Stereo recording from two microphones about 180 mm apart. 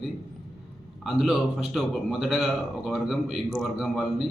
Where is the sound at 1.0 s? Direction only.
Centre (ahead or behind).